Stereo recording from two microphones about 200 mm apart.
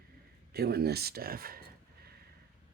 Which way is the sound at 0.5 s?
50° right (ahead or behind).